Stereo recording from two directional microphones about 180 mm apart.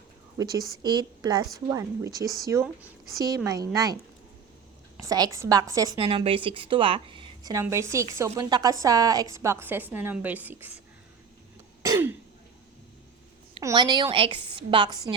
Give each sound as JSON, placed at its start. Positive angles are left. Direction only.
{"t": 0.3, "sound": "a woman's voice", "side_deg": -20}
{"t": 4.9, "sound": "a woman's voice", "side_deg": -20}
{"t": 6.0, "sound": "a woman's voice", "side_deg": -30}
{"t": 11.8, "sound": "throat clearing", "side_deg": -15}
{"t": 13.6, "sound": "a woman's voice", "side_deg": -20}